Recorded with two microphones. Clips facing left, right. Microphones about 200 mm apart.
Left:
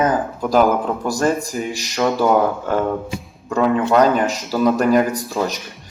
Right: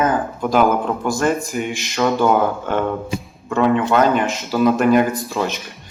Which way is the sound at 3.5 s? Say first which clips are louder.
Even; 40° left (ahead or behind).